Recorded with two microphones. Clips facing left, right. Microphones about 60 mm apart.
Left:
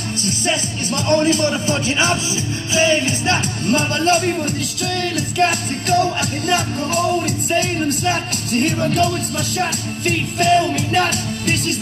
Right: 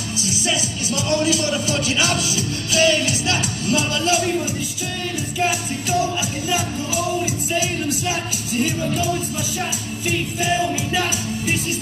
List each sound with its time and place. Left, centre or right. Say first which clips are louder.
0.2 s speech: left 2 dB; left
2.7 s music: left 1 dB; left
3.3 s speech: left 3 dB; left
5.4 s music: left 4 dB; left